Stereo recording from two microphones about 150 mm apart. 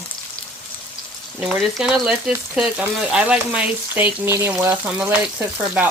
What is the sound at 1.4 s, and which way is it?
Speech, centre (ahead or behind).